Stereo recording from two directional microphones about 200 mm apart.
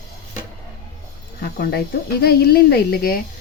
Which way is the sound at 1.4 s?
50° left (ahead or behind).